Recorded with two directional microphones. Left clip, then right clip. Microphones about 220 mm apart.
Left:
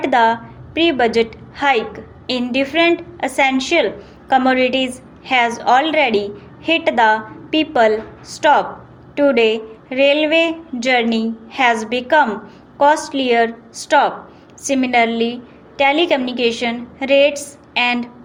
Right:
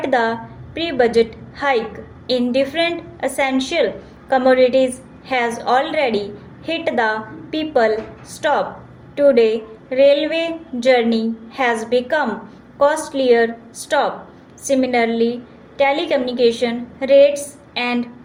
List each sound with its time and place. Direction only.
0.0 s a woman's voice: 30° left (ahead or behind)